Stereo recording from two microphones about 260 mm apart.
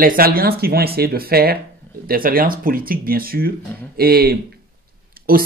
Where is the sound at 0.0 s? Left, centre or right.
Right.